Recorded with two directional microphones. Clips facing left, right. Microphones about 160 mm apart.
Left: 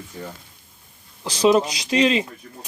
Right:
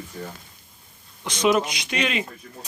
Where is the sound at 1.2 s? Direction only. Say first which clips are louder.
Left 4 dB; 30° left (ahead or behind).